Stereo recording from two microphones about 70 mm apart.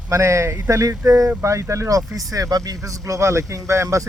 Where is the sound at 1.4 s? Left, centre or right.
Right.